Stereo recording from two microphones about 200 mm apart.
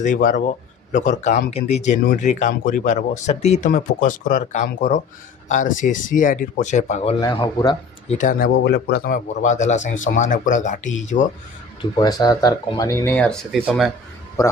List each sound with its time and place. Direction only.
0.0 s speech: 40° left (ahead or behind)
7.2 s speech: 20° left (ahead or behind); by 11.3 s 35° left (ahead or behind)
11.8 s speech: 20° left (ahead or behind); by 13.9 s 5° right (ahead or behind)